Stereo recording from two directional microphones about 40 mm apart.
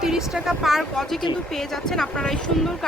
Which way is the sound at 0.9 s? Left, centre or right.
Centre.